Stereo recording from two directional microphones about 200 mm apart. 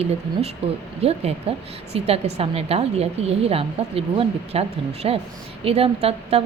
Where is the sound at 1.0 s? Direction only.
30° right (ahead or behind).